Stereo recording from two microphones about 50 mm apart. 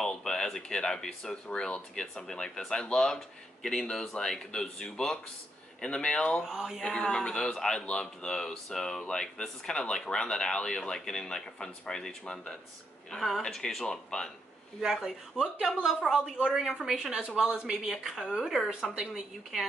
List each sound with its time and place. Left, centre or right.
0.0 s a sound: centre
0.7 s speech: centre
6.4 s speech: centre
6.8 s speech: centre
13.8 s speech: centre
14.8 s speech: centre
18.7 s speech: centre